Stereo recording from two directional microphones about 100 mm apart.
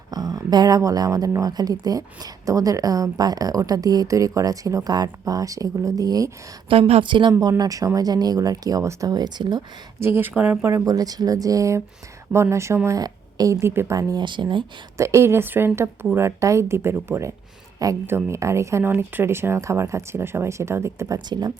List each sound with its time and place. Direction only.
0.1 s speech: 40° right (ahead or behind)
6.7 s speech: 90° right
7.0 s speech: 55° right (ahead or behind)
7.3 s speech: 35° right (ahead or behind)
10.0 s speech: 25° right (ahead or behind)
10.8 s speech: 40° right (ahead or behind)
13.0 s a woman's voice: 40° right (ahead or behind)
13.9 s speech: 35° right (ahead or behind)
14.3 s speech: 50° right (ahead or behind)
14.9 s speech: 30° right (ahead or behind)